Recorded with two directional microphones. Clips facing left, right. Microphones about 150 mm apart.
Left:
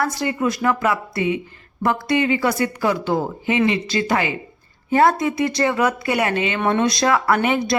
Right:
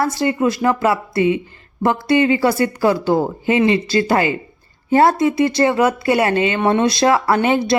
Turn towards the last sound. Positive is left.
turn(degrees=-30)  # may be behind; listen again after turning